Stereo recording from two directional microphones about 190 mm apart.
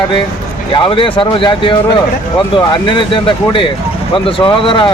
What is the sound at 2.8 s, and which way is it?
Speech, 25° left (ahead or behind).